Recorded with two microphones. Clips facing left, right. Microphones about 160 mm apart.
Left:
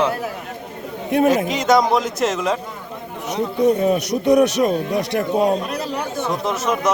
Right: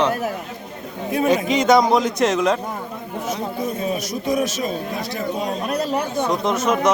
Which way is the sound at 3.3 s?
70° left (ahead or behind).